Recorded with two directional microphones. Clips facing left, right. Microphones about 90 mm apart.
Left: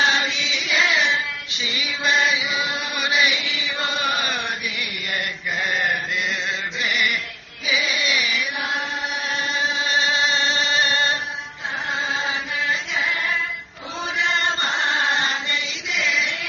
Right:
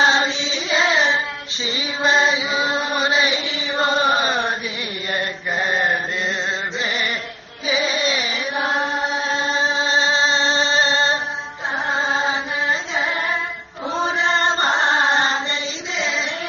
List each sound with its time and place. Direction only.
0.0 s chant: 30° right (ahead or behind)
11.9 s carnatic music: 30° right (ahead or behind)
13.9 s chant: 35° right (ahead or behind)
16.0 s music: 30° right (ahead or behind)